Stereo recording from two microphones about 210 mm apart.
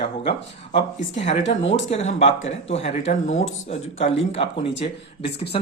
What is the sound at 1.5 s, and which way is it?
Speech, 30° left (ahead or behind).